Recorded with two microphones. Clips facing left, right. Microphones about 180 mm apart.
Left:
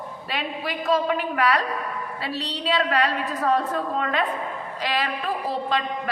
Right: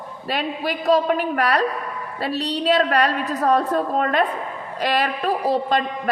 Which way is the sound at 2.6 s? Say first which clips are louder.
Right 4 dB; 45° right (ahead or behind).